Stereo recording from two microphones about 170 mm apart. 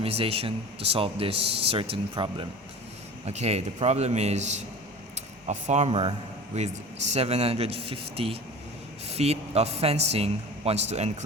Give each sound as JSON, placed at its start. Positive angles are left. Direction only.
{"t": 0.0, "sound": "a man's voice", "side_deg": -35}